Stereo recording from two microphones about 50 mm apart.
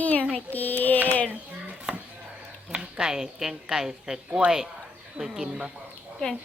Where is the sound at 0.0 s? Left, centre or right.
Left.